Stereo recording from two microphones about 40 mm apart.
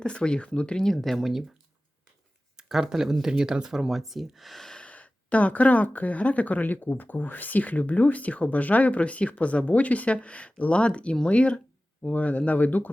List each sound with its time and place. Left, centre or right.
0.0 s speech: left
0.9 s speech: centre
2.6 s a sound: centre
2.9 s speech: centre
4.8 s speech: left